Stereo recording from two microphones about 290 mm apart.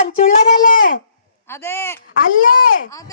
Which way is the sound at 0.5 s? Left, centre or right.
Left.